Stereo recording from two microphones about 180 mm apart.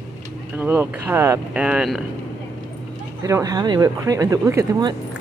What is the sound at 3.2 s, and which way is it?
Speech, 20° right (ahead or behind).